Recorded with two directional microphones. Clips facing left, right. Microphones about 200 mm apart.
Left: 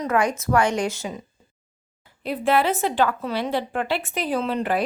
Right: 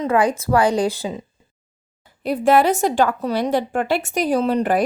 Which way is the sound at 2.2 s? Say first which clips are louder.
Right 5 dB; 45° right (ahead or behind).